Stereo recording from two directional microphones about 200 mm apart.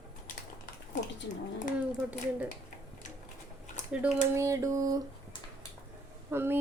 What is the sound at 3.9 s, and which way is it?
A woman's voice, 10° right (ahead or behind).